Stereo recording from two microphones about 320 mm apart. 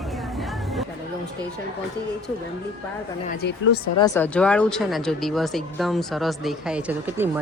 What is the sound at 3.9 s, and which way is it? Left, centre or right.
Speech, centre.